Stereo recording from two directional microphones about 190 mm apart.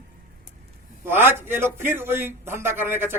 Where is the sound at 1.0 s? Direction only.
10° right (ahead or behind).